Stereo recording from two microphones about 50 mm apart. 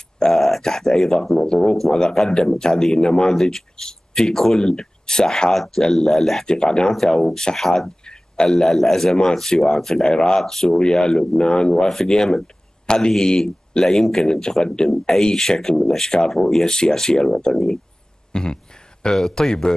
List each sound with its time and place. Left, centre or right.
0.2 s a sound: centre
1.4 s speech: centre
5.5 s speech: centre
6.4 s speech: centre
8.5 s speech: centre
18.3 s a sound: centre
19.1 s speech: centre